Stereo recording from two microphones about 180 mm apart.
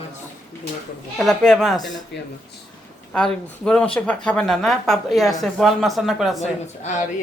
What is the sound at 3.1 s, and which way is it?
Speech, 5° left (ahead or behind).